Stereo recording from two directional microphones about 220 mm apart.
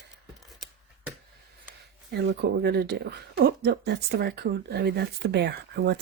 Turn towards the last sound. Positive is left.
turn(degrees=-50)  # may be behind; listen again after turning